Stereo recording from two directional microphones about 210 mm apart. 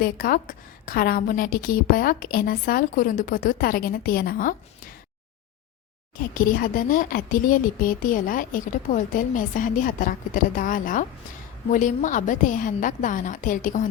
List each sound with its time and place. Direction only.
0.0 s a woman's voice: 45° left (ahead or behind)
6.1 s speech: 40° left (ahead or behind)